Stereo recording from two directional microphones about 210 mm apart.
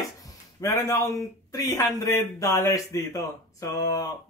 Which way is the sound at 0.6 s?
15° left (ahead or behind).